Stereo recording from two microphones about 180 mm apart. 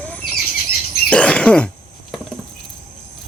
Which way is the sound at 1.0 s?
5° left (ahead or behind).